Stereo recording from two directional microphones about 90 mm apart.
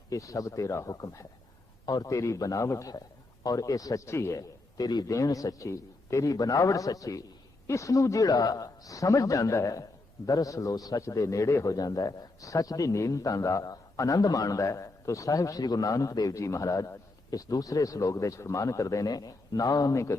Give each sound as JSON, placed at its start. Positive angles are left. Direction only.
{"t": 0.1, "sound": "a man's voice", "side_deg": 40}